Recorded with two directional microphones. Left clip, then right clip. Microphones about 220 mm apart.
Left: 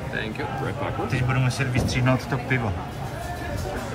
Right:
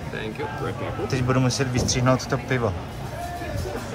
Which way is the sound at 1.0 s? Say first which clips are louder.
Right 7 dB; 15° right (ahead or behind).